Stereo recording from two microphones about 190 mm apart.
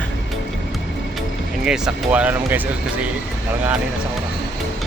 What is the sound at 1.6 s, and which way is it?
Speech, 5° right (ahead or behind).